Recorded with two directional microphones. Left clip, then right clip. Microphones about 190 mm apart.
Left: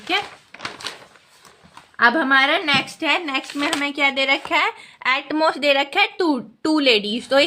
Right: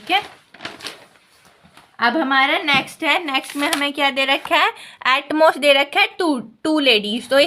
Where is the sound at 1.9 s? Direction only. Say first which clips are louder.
Left 1 dB; 5° left (ahead or behind).